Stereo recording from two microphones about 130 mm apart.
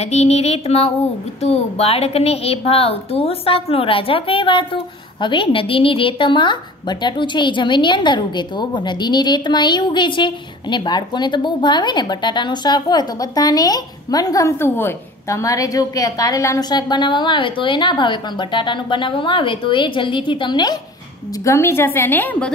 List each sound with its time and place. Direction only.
0.0 s a sound: 55° left (ahead or behind)
1.4 s a woman's voice: 50° left (ahead or behind); by 20.8 s 35° left (ahead or behind)
21.5 s a woman's voice: 20° left (ahead or behind)